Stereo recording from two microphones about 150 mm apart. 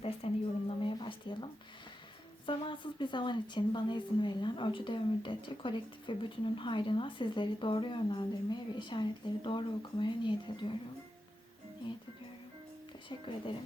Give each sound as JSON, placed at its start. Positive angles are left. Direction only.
{"t": 0.2, "sound": "a sound", "side_deg": 40}
{"t": 2.5, "sound": "speech", "side_deg": 35}
{"t": 13.1, "sound": "speech", "side_deg": 35}